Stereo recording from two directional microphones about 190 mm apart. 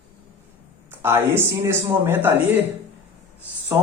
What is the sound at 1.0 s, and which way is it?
Speech, 15° right (ahead or behind).